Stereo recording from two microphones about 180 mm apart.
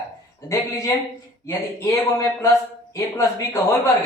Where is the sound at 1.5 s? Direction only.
15° left (ahead or behind).